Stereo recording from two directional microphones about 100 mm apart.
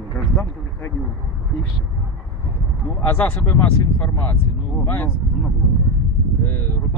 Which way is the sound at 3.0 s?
20° left (ahead or behind).